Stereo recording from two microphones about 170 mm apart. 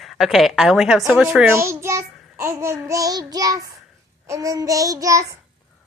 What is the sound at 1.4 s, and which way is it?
Speech, 15° right (ahead or behind).